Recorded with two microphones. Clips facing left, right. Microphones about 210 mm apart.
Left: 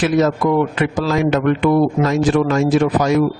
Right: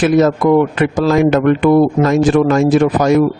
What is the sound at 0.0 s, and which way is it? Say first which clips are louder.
A man's voice: right 4 dB; 50° right (ahead or behind).